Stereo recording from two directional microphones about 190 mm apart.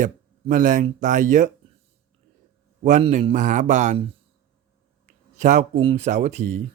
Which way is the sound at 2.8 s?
35° right (ahead or behind).